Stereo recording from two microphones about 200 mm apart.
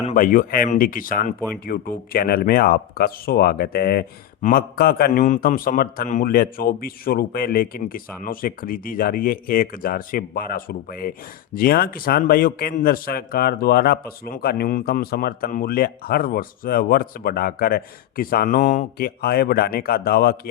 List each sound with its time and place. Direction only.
0.0 s a man's voice: 40° left (ahead or behind)